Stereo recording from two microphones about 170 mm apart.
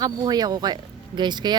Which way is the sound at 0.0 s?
25° right (ahead or behind).